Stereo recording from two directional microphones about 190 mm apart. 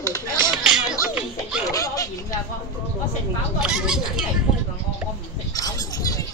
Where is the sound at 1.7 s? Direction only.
15° left (ahead or behind).